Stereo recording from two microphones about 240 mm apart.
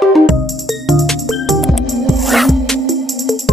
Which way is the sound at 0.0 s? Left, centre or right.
Centre.